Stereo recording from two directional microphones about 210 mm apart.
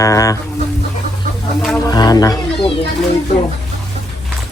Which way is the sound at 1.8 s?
20° left (ahead or behind).